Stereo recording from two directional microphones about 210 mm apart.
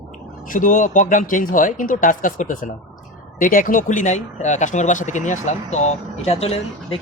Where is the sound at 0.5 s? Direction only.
40° left (ahead or behind).